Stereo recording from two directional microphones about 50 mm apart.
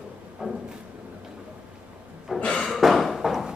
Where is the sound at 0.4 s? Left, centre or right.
Centre.